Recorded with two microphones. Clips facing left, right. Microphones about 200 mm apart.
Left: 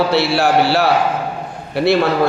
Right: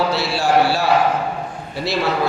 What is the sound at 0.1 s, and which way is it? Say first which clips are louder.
A woman's voice: left 3 dB; 65° left (ahead or behind).